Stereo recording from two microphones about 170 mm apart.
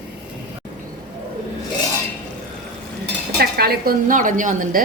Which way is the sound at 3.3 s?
65° right (ahead or behind).